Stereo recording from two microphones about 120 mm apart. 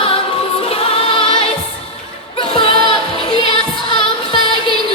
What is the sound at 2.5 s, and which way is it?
Music, 45° left (ahead or behind).